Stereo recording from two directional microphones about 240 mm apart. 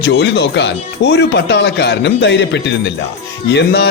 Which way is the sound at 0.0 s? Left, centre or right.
Left.